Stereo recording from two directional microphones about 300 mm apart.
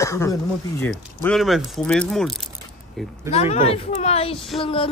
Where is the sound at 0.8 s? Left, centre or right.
Centre.